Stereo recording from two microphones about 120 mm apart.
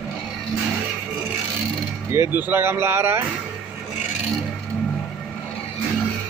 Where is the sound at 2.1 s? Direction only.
20° right (ahead or behind).